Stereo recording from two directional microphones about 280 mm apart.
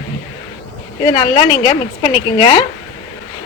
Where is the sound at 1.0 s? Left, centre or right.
Centre.